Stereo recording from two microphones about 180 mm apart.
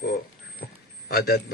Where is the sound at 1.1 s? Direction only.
60° left (ahead or behind).